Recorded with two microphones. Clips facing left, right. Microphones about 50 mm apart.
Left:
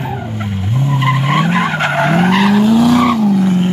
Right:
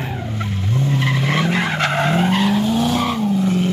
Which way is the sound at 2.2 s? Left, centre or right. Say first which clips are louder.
Left 6 dB; left.